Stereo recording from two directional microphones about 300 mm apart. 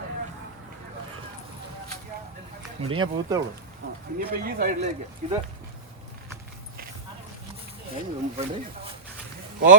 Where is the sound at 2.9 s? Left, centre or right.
Centre.